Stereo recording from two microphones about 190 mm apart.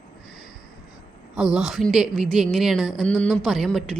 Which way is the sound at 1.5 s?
Centre (ahead or behind).